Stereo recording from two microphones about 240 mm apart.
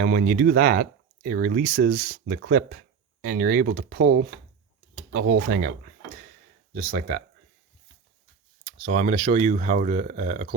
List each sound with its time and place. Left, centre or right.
0.0 s speech: right
8.6 s speech: right